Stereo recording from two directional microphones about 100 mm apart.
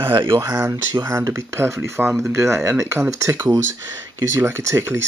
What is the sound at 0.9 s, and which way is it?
Speech, 35° right (ahead or behind).